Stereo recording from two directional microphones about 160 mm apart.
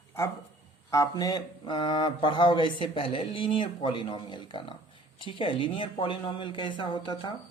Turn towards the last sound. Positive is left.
turn(degrees=30)  # may be behind; listen again after turning